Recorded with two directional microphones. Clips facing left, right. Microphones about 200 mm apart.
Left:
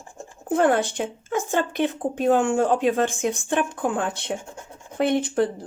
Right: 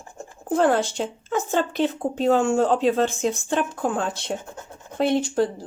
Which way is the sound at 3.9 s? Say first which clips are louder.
Even; 60° left (ahead or behind).